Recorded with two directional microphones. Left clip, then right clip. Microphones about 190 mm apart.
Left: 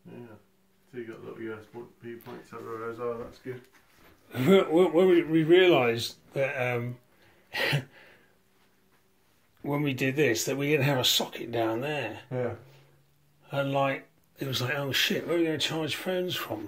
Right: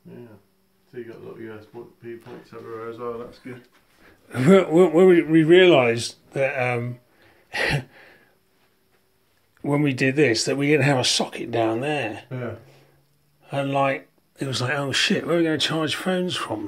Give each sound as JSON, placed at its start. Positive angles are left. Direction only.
{"t": 2.0, "sound": "speech", "side_deg": -10}
{"t": 4.3, "sound": "speech", "side_deg": -25}
{"t": 7.4, "sound": "a sound", "side_deg": -20}
{"t": 9.6, "sound": "speech", "side_deg": -30}
{"t": 13.5, "sound": "speech", "side_deg": -25}